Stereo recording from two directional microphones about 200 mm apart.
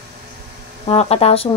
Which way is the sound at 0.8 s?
30° left (ahead or behind).